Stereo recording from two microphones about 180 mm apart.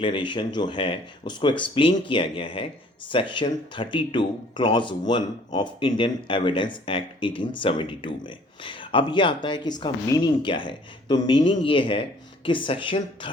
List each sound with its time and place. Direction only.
0.0 s speech: 25° left (ahead or behind)